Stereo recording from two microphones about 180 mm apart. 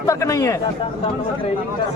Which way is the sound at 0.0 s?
15° left (ahead or behind).